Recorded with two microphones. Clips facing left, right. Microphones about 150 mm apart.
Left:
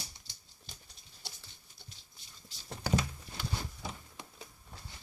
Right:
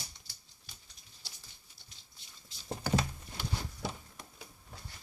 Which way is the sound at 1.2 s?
55° left (ahead or behind).